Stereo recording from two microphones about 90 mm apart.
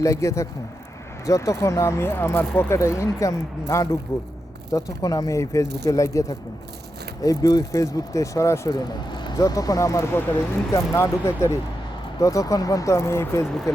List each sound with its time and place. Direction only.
0.0 s speech: 35° left (ahead or behind)
4.7 s speech: 45° left (ahead or behind)
8.7 s speech: 55° left (ahead or behind)
9.4 s speech: 40° left (ahead or behind)